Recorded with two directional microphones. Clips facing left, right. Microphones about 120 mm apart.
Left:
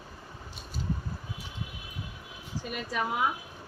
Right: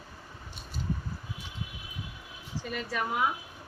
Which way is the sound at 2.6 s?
15° left (ahead or behind).